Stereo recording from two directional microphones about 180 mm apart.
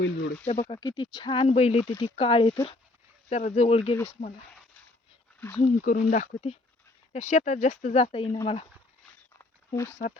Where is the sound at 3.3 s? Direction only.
40° left (ahead or behind).